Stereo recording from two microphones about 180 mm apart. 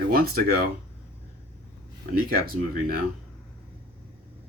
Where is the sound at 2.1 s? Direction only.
50° right (ahead or behind).